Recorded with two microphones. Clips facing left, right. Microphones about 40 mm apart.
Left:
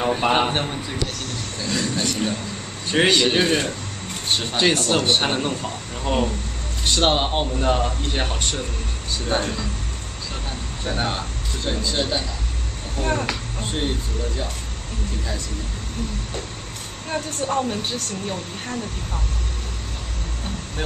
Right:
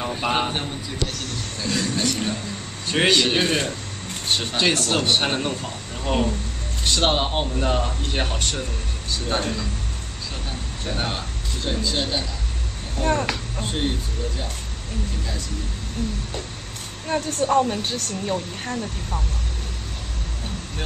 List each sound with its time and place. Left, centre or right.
0.0 s a man's voice: left
1.6 s a man's voice: centre
11.0 s speech: centre
17.1 s speech: centre